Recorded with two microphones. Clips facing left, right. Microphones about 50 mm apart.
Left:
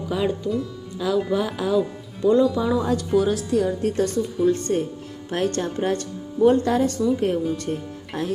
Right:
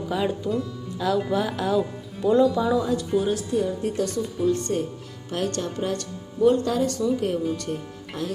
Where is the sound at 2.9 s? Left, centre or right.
Left.